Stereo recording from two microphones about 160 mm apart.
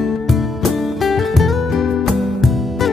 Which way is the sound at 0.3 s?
Centre (ahead or behind).